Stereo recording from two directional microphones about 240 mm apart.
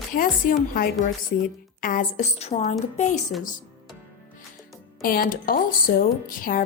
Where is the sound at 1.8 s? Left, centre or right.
Left.